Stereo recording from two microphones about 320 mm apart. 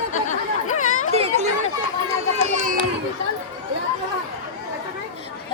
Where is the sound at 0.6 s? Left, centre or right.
Left.